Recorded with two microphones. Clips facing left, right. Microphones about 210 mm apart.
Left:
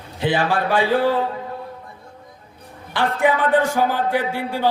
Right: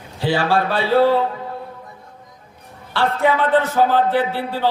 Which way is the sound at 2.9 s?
15° left (ahead or behind).